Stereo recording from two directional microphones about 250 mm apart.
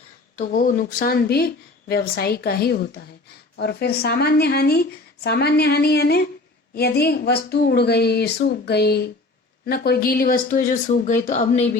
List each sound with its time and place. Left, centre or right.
0.3 s speech: left